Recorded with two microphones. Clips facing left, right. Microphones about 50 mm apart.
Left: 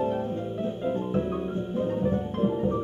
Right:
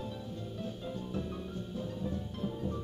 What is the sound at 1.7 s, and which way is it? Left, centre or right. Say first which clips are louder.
Music: left 13 dB; left.